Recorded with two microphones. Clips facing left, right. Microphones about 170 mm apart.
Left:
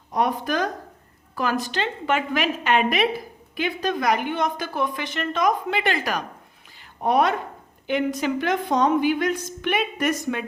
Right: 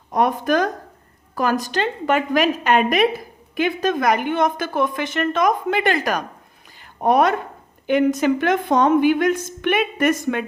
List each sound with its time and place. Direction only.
0.1 s a woman's voice: 50° right (ahead or behind)
6.7 s a sound: 50° right (ahead or behind)
7.9 s a woman's voice: 50° right (ahead or behind)